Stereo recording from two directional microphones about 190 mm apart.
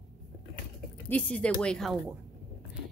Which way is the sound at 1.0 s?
5° left (ahead or behind).